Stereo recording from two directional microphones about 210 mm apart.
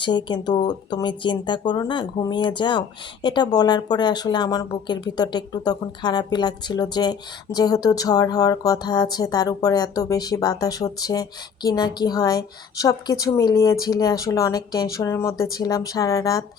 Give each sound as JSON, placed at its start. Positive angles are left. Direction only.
{"t": 0.0, "sound": "speech", "side_deg": 20}